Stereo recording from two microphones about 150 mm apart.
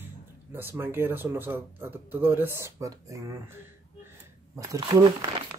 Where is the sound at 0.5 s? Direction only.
15° right (ahead or behind).